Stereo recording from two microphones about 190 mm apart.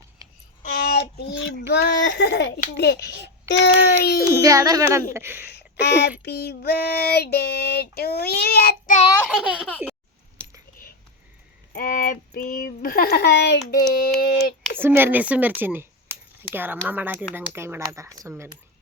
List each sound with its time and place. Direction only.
0.2 s a sound: 20° right (ahead or behind)
0.6 s child singing: 45° left (ahead or behind); by 4.2 s 60° left (ahead or behind)
4.4 s speech: 15° right (ahead or behind)
5.8 s child singing: 60° left (ahead or behind)
10.4 s coin: 5° left (ahead or behind)
11.7 s child singing: 45° left (ahead or behind); by 13.7 s 65° left (ahead or behind)
14.0 s child singing: 55° left (ahead or behind)
14.8 s speech: 10° right (ahead or behind)